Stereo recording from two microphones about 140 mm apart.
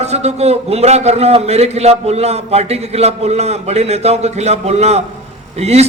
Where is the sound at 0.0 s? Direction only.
50° right (ahead or behind).